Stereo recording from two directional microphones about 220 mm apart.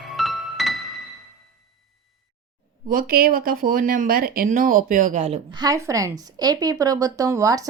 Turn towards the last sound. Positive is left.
turn(degrees=-15)  # may be behind; listen again after turning